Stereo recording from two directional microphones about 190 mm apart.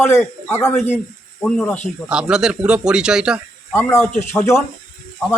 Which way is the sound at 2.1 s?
5° right (ahead or behind).